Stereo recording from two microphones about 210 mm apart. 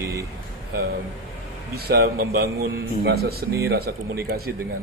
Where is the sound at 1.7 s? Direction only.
50° right (ahead or behind).